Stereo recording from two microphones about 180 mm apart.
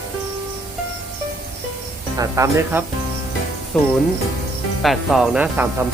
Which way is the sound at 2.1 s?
20° right (ahead or behind).